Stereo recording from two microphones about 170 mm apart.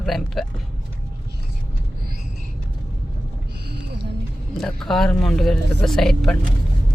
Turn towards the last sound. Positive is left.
turn(degrees=5)  # may be behind; listen again after turning